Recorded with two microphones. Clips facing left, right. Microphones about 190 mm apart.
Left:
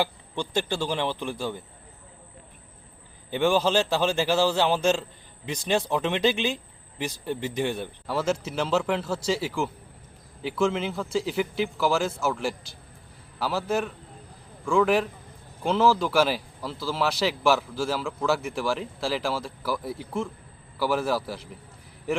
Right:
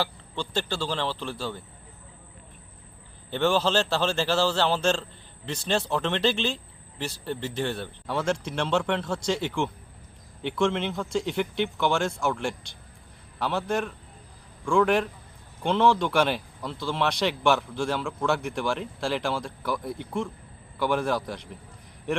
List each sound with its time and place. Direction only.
0.0 s a man's voice: 15° left (ahead or behind)
3.2 s a man's voice: 10° left (ahead or behind)